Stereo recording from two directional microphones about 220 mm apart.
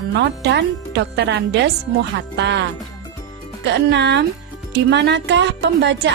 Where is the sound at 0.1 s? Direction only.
50° right (ahead or behind).